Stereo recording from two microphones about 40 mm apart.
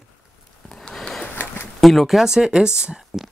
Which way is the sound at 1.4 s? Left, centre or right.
Left.